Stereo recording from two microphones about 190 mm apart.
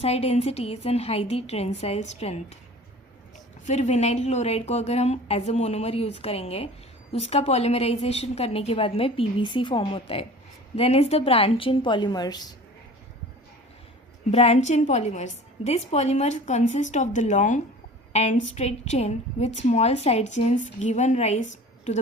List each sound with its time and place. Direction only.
0.0 s a woman's voice: 35° left (ahead or behind)
3.7 s a woman's voice: 35° left (ahead or behind); by 12.5 s 20° left (ahead or behind)
14.3 s a woman's voice: 35° left (ahead or behind)